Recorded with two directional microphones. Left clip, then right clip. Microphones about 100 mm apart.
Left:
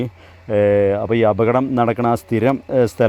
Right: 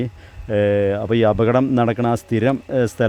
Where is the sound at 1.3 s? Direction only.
25° right (ahead or behind).